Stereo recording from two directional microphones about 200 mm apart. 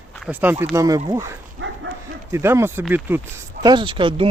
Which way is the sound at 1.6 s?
70° right (ahead or behind).